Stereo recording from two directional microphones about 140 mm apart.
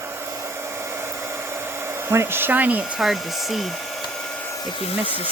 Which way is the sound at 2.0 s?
15° right (ahead or behind).